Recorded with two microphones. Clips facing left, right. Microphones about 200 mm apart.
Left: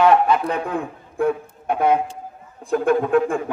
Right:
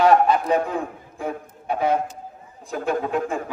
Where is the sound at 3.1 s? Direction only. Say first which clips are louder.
Left 6 dB; 55° left (ahead or behind).